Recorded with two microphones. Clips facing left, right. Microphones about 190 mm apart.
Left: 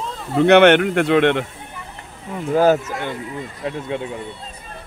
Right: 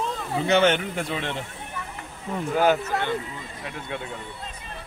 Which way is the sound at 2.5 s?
35° left (ahead or behind).